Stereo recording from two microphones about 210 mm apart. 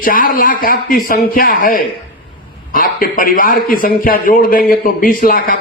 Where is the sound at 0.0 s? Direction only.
40° left (ahead or behind).